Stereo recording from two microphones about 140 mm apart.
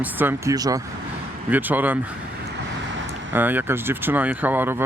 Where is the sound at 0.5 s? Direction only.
25° right (ahead or behind).